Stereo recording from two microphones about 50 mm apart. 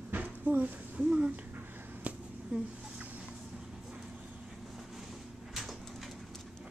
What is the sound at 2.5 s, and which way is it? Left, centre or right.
Speech, right.